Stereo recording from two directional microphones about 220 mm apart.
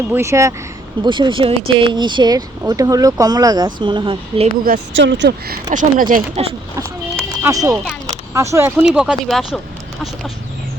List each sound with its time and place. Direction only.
0.1 s speech: 10° right (ahead or behind)
4.9 s speech: 55° right (ahead or behind)
5.7 s speech: 40° right (ahead or behind)
6.7 s speech: 15° right (ahead or behind)